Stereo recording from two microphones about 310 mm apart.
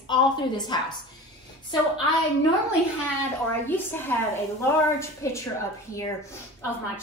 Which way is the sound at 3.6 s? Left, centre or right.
Centre.